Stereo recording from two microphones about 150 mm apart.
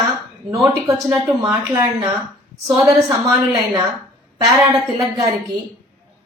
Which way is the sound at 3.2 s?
20° right (ahead or behind).